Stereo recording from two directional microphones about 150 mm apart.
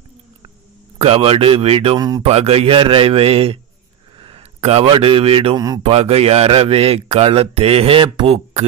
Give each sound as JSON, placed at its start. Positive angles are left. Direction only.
{"t": 0.9, "sound": "speech", "side_deg": -40}
{"t": 2.0, "sound": "speech", "side_deg": -25}
{"t": 2.2, "sound": "a man's voice", "side_deg": -40}